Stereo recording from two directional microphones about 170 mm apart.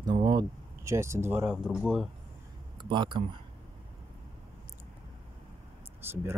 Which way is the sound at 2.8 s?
30° right (ahead or behind).